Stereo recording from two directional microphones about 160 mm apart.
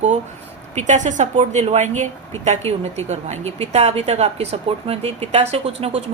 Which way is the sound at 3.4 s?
40° right (ahead or behind).